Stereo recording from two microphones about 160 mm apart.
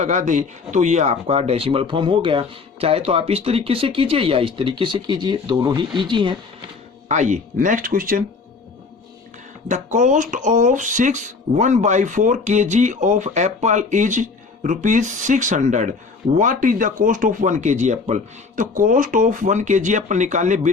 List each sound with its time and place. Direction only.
0.0 s speech: 50° right (ahead or behind); by 6.4 s 30° right (ahead or behind)
7.1 s speech: 50° right (ahead or behind)
9.6 s speech: 50° right (ahead or behind)